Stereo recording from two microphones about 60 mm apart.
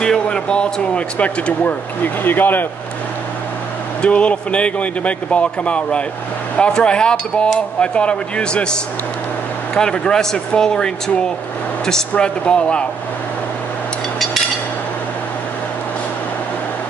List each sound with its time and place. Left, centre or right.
0.0 s speech: centre; by 2.6 s left
4.0 s speech: left
9.8 s speech: centre
12.2 s speech: centre